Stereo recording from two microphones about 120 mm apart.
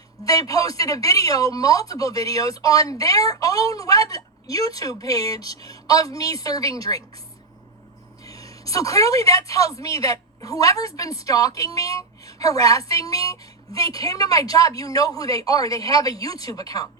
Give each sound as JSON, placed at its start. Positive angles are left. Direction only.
{"t": 0.3, "sound": "a woman's voice", "side_deg": 30}
{"t": 8.2, "sound": "a woman's voice", "side_deg": 30}